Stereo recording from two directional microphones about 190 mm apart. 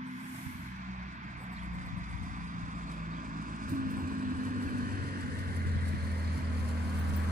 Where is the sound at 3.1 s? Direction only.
45° right (ahead or behind).